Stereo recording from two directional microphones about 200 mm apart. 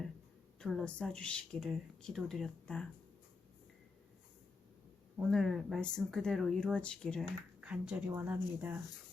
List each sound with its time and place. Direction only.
0.6 s speech: centre (ahead or behind)
5.3 s speech: centre (ahead or behind)